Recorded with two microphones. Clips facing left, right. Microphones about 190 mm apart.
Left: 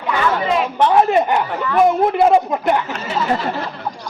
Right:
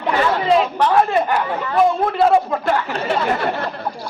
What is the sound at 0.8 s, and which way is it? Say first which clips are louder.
A man's voice: left 2 dB; 20° left (ahead or behind).